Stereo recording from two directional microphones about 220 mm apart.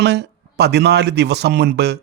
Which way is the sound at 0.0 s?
50° right (ahead or behind).